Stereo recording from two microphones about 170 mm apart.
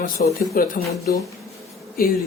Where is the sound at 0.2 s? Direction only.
60° left (ahead or behind).